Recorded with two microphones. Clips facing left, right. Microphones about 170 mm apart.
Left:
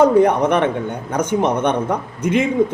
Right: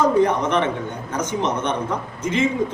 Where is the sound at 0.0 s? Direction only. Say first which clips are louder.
Left 5 dB; 60° left (ahead or behind).